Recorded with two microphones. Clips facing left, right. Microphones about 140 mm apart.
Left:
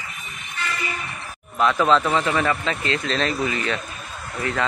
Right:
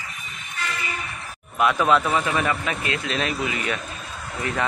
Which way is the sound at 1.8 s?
15° right (ahead or behind).